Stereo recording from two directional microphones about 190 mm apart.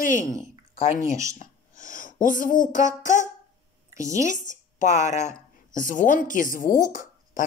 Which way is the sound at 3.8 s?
15° right (ahead or behind).